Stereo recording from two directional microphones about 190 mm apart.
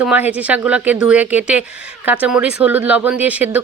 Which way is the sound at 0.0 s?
5° right (ahead or behind).